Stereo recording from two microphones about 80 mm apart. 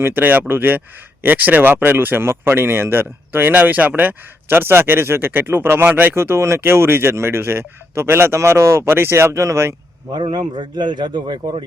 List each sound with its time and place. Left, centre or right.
0.0 s speech: right
10.1 s a man's voice: right